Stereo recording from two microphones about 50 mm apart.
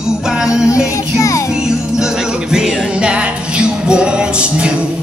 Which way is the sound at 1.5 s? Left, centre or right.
Centre.